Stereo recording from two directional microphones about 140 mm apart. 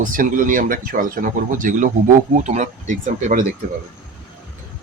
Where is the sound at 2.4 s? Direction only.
55° right (ahead or behind).